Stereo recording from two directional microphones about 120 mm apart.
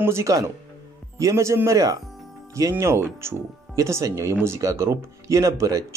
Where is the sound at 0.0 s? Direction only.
25° right (ahead or behind).